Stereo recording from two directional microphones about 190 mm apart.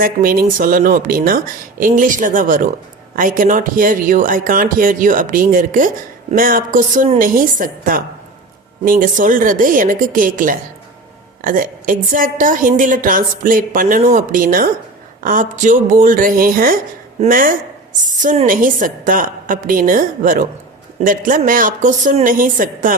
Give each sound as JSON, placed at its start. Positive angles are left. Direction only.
{"t": 0.0, "sound": "a woman's voice", "side_deg": -50}